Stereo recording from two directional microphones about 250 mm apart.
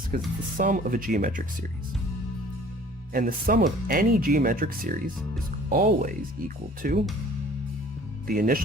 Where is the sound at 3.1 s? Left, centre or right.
Right.